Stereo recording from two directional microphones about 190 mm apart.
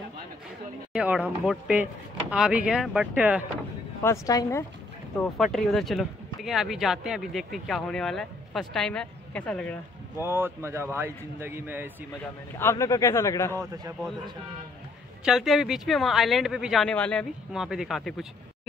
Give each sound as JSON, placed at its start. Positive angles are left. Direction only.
{"t": 0.9, "sound": "speech", "side_deg": -5}
{"t": 4.0, "sound": "a man's voice", "side_deg": 15}
{"t": 5.2, "sound": "speech", "side_deg": 0}
{"t": 10.2, "sound": "a man's voice", "side_deg": -10}
{"t": 12.5, "sound": "a man's voice", "side_deg": 15}
{"t": 15.2, "sound": "speech", "side_deg": 0}